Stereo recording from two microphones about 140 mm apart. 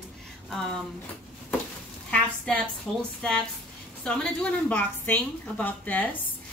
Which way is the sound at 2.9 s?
5° left (ahead or behind).